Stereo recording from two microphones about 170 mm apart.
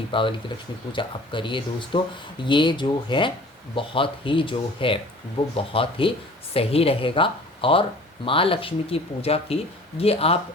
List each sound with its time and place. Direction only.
0.1 s speech: 30° left (ahead or behind)